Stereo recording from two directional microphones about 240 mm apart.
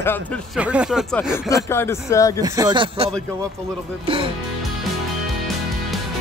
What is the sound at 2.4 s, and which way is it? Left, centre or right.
Speech, centre.